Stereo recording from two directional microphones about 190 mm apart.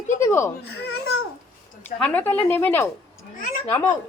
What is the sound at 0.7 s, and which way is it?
Babbling, 60° left (ahead or behind).